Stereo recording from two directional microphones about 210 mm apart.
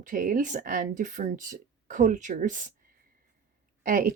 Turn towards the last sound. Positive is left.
turn(degrees=-40)  # may be behind; listen again after turning